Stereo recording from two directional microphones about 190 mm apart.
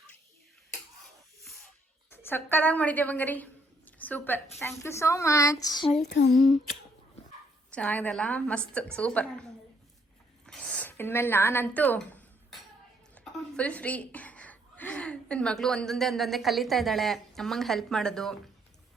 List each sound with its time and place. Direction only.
2.0 s a woman's voice: 10° left (ahead or behind)
6.1 s humming: 65° left (ahead or behind)
6.3 s a sound: centre (ahead or behind)
7.7 s a woman's voice: 5° left (ahead or behind)
10.4 s a sound: 5° left (ahead or behind)
13.1 s a woman's voice: 5° left (ahead or behind)